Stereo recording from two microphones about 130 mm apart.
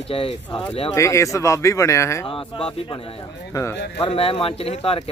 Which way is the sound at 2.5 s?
40° left (ahead or behind).